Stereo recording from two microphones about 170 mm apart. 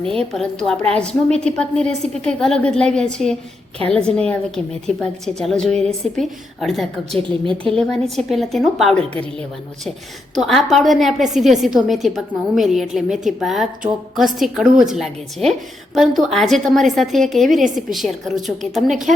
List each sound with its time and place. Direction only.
0.0 s a woman's voice: 5° left (ahead or behind)
7.2 s a woman's voice: 30° right (ahead or behind)
7.7 s a woman's voice: centre (ahead or behind)
10.3 s a woman's voice: centre (ahead or behind)